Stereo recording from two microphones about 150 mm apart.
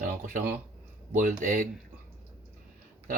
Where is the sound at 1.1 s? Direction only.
60° right (ahead or behind).